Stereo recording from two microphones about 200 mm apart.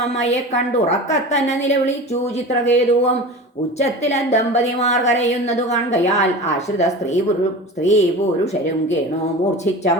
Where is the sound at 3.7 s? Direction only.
35° left (ahead or behind).